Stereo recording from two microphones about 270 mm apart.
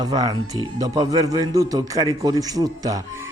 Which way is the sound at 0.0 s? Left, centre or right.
Centre.